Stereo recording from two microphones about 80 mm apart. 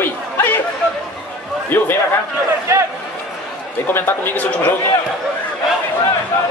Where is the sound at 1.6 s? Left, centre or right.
Left.